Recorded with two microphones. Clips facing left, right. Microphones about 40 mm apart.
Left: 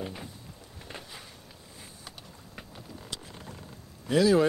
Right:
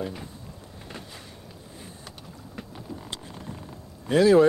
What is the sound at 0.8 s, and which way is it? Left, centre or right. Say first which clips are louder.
Boat: right 2 dB; centre.